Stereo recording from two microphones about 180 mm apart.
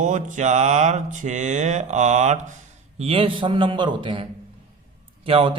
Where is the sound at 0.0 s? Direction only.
45° right (ahead or behind).